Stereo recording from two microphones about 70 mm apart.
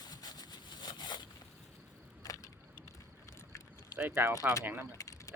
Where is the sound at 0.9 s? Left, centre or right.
Left.